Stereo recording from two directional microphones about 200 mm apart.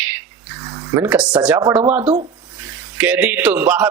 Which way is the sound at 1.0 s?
5° right (ahead or behind).